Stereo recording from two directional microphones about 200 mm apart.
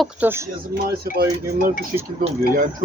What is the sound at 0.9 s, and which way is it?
Speech, 50° right (ahead or behind).